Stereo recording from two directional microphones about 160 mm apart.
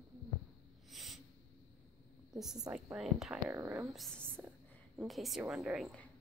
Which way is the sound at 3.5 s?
15° right (ahead or behind).